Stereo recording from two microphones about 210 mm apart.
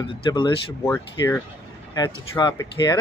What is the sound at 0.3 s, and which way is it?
Speech, 15° left (ahead or behind).